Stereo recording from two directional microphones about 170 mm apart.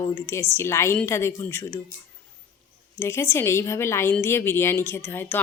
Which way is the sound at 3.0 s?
15° left (ahead or behind).